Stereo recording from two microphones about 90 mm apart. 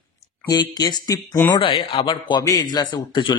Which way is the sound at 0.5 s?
50° left (ahead or behind).